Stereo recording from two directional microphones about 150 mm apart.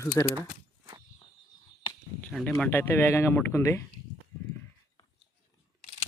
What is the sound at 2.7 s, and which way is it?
Speech, 15° left (ahead or behind).